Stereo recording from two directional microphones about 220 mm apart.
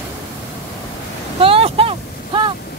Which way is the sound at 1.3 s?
25° right (ahead or behind).